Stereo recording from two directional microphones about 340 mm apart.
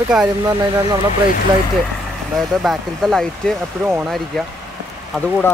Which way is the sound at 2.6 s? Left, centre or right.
Centre.